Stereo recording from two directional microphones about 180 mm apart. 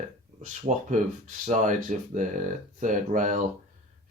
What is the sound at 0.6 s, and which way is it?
Speech, 45° right (ahead or behind).